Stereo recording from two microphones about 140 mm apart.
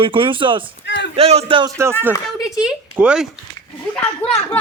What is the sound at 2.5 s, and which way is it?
Speech, 5° right (ahead or behind).